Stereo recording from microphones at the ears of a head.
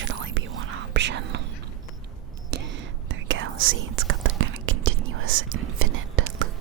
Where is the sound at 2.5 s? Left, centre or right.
Right.